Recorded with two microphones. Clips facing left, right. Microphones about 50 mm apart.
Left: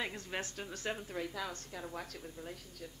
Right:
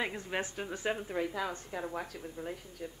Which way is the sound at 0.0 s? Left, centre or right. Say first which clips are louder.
Right 5 dB; centre.